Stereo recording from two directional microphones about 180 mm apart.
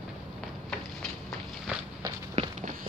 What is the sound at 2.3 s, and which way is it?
Walk, 35° right (ahead or behind).